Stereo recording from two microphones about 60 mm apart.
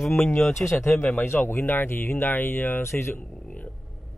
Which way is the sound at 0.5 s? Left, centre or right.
Left.